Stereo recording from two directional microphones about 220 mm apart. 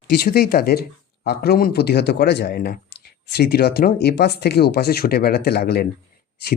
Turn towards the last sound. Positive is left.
turn(degrees=45)  # may be behind; listen again after turning